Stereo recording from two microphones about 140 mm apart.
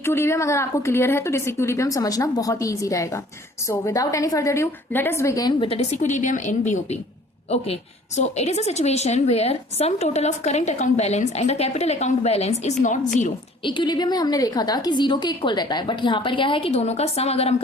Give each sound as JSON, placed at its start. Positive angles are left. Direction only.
{"t": 0.0, "sound": "a woman's voice", "side_deg": 20}
{"t": 5.6, "sound": "a woman's voice", "side_deg": 45}
{"t": 13.7, "sound": "a woman's voice", "side_deg": 35}